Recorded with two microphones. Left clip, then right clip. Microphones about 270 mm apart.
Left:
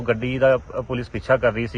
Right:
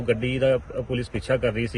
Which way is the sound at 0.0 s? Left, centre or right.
Left.